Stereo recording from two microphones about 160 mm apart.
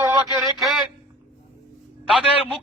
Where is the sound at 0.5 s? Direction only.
Centre (ahead or behind).